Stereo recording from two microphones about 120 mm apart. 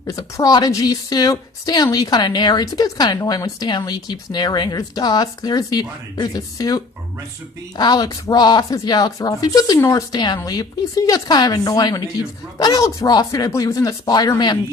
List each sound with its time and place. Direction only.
0.2 s speech: 30° left (ahead or behind)